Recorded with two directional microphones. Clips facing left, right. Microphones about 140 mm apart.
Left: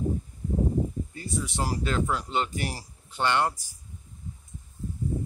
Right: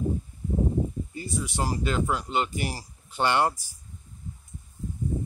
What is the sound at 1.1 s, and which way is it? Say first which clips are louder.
Speech: right 1 dB; centre (ahead or behind).